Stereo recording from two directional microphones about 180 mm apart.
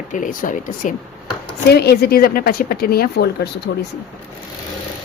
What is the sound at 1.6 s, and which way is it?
A woman's voice, 65° left (ahead or behind).